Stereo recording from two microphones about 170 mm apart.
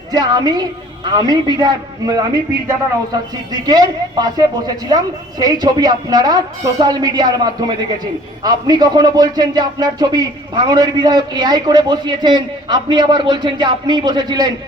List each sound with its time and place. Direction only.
0.1 s speech: 25° right (ahead or behind)